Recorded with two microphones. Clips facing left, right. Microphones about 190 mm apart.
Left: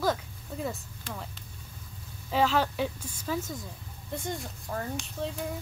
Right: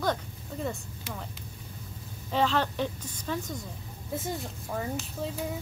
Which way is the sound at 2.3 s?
5° left (ahead or behind).